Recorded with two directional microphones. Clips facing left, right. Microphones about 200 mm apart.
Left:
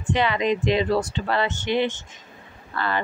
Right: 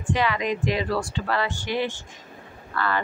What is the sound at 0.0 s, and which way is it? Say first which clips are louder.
Speech: left 2 dB; 25° left (ahead or behind).